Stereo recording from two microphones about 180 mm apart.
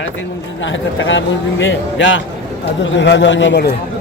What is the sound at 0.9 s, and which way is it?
A man's voice, 90° left.